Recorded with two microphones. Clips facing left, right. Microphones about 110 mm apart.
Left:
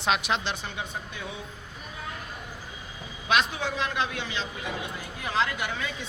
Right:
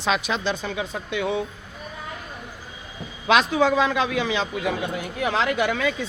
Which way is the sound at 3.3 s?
90° right.